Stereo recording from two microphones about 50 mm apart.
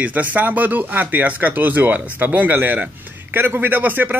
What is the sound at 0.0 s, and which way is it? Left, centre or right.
Speech, right.